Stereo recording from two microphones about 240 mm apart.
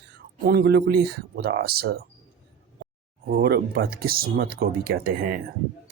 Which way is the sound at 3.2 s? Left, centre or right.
Right.